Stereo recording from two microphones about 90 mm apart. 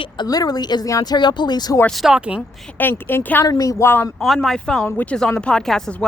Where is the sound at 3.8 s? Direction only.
25° left (ahead or behind).